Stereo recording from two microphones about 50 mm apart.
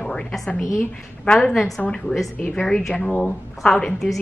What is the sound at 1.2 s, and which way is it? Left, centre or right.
A woman's voice, centre.